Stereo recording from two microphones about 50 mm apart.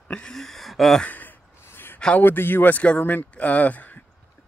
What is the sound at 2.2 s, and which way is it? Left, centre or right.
Speech, left.